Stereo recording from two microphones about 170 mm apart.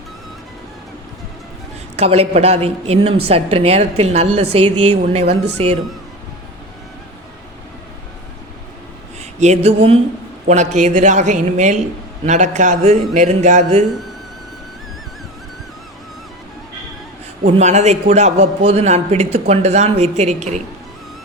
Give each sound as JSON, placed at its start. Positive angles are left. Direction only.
{"t": 2.0, "sound": "a man's voice", "side_deg": -40}
{"t": 9.4, "sound": "a man's voice", "side_deg": -40}
{"t": 17.4, "sound": "a man's voice", "side_deg": -40}